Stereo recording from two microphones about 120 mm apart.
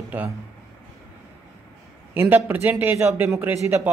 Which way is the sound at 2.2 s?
15° right (ahead or behind).